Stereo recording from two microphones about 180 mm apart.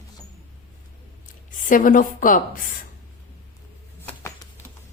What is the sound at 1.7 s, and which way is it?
Speech, 50° left (ahead or behind).